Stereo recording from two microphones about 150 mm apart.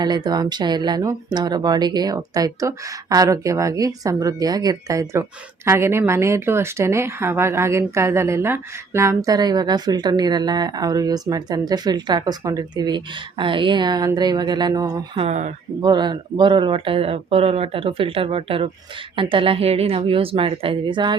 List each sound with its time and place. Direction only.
0.0 s a woman's voice: 25° right (ahead or behind)
15.2 s speech: 50° right (ahead or behind)
15.8 s speech: 30° right (ahead or behind)